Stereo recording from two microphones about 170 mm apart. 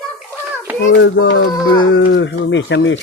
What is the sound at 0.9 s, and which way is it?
Speech, 90° left.